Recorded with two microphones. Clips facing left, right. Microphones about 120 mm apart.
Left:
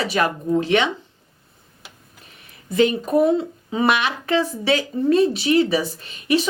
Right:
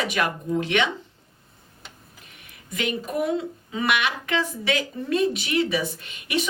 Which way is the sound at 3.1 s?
35° left (ahead or behind).